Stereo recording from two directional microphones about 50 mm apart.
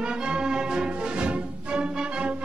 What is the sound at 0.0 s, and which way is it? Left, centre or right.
Music, centre.